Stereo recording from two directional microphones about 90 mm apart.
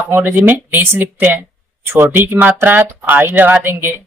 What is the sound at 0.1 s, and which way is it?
Speech, 25° right (ahead or behind).